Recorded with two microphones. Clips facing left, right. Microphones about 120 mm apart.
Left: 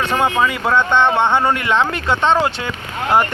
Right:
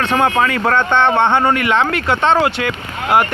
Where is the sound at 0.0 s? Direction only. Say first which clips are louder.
Right 2 dB; 10° left (ahead or behind).